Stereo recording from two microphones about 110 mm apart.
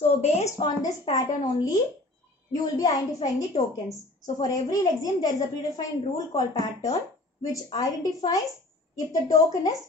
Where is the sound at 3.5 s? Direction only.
75° left (ahead or behind).